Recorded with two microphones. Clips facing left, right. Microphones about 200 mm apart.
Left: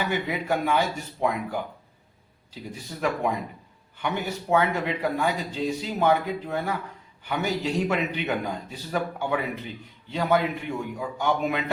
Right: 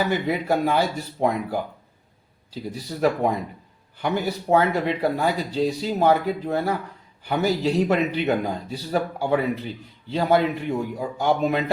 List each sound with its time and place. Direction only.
0.1 s speech: 35° right (ahead or behind)